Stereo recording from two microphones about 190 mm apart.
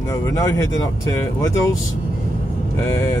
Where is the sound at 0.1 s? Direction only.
15° left (ahead or behind).